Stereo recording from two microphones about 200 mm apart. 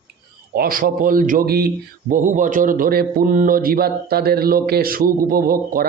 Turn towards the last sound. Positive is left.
turn(degrees=-45)  # may be behind; listen again after turning